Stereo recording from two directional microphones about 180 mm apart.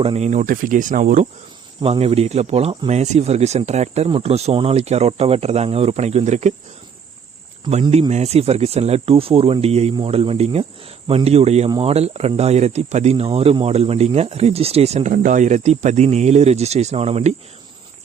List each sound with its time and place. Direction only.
0.0 s speech: 35° right (ahead or behind)
1.8 s speech: 30° right (ahead or behind)
7.6 s speech: 35° right (ahead or behind)